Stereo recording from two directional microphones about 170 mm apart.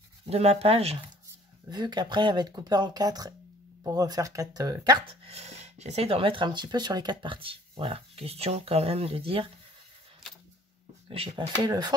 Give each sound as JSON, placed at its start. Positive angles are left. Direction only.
{"t": 0.3, "sound": "speech", "side_deg": -35}
{"t": 1.7, "sound": "speech", "side_deg": -25}
{"t": 11.1, "sound": "speech", "side_deg": -35}
{"t": 11.6, "sound": "speech", "side_deg": -25}